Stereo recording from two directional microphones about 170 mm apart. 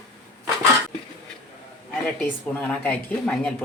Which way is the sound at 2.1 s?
10° left (ahead or behind).